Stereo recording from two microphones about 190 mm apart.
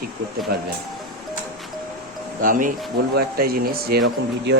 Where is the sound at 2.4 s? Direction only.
45° right (ahead or behind).